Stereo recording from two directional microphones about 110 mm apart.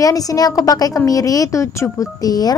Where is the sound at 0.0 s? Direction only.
30° left (ahead or behind).